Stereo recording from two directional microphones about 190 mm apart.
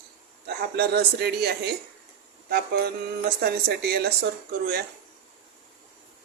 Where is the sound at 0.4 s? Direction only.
60° right (ahead or behind).